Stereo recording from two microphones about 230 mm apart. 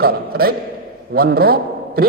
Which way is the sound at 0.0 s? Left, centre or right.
Right.